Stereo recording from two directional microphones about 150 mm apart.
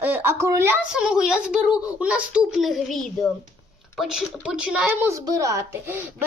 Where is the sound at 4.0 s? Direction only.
5° right (ahead or behind).